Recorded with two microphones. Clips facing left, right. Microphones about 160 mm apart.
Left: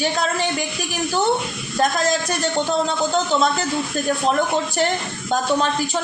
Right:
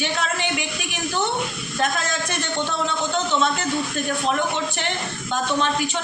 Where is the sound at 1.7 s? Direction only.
35° left (ahead or behind).